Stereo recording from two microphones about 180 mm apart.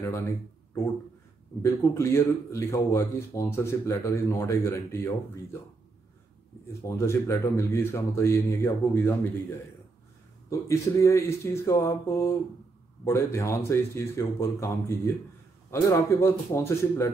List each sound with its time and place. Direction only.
1.6 s speech: 15° left (ahead or behind)
6.8 s speech: 15° left (ahead or behind)